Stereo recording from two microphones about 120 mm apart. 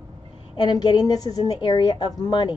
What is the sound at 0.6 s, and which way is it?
A woman's voice, 35° left (ahead or behind).